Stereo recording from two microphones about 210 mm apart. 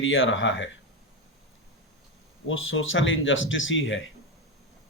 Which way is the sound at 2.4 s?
70° left (ahead or behind).